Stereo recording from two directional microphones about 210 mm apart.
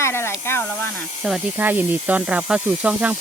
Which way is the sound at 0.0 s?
10° left (ahead or behind).